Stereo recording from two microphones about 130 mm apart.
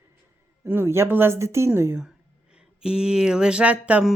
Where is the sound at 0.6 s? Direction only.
15° right (ahead or behind).